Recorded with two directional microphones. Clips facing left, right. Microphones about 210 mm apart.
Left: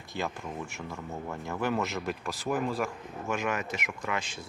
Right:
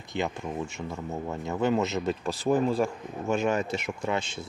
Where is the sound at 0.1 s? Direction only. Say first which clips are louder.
Right 4 dB; 20° right (ahead or behind).